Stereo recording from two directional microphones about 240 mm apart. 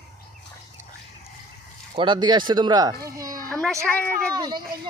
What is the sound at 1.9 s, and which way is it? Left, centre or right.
A child's voice, centre.